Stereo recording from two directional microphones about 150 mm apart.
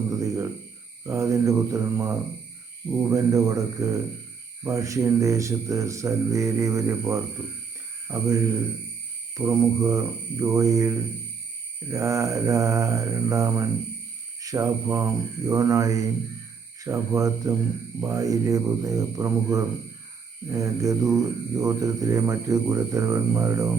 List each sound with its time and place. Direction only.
0.1 s a sound: 20° right (ahead or behind)
1.0 s speech: 20° right (ahead or behind)
9.4 s speech: 20° right (ahead or behind)